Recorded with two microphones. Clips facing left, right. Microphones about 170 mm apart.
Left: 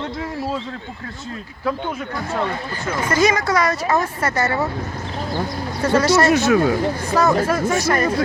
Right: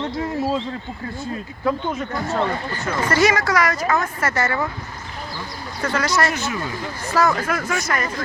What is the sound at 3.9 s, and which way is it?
Speech, 20° left (ahead or behind).